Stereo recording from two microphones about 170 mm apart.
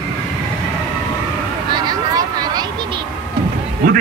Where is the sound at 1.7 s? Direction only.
25° right (ahead or behind).